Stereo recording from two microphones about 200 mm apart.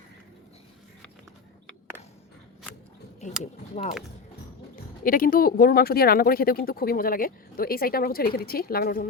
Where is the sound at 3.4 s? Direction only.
35° left (ahead or behind).